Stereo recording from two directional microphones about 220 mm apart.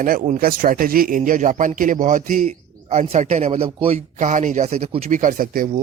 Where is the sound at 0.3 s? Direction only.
40° right (ahead or behind).